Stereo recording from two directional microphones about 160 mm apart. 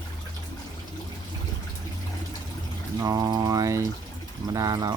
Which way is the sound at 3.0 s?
25° right (ahead or behind).